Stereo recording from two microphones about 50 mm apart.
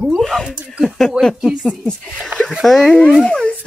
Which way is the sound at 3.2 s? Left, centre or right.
Centre.